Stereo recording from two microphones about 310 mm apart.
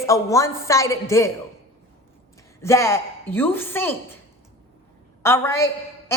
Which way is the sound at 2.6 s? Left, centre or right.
Centre.